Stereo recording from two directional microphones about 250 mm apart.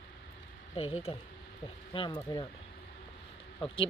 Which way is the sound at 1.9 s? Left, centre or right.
Centre.